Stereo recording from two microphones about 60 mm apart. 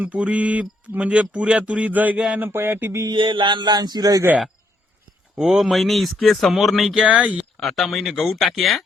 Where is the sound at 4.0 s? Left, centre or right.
Right.